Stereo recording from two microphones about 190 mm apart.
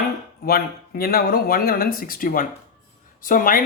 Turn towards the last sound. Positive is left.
turn(degrees=45)  # may be behind; listen again after turning